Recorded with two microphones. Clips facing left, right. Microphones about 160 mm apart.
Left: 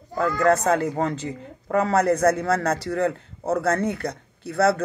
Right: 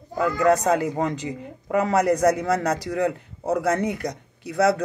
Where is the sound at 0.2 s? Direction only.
15° right (ahead or behind).